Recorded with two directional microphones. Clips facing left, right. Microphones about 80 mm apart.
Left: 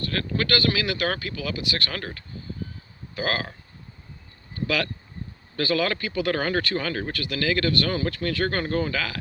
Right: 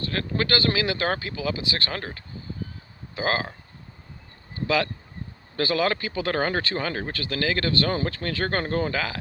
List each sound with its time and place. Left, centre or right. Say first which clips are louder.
0.0 s speech: even; right
4.5 s speech: right 2 dB; right